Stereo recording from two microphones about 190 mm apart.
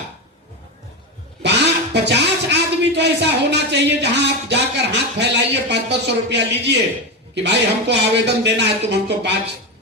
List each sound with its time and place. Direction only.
1.4 s speech: 65° right (ahead or behind)